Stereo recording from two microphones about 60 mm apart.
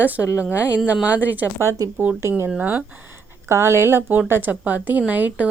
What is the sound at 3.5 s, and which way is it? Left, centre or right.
Speech, right.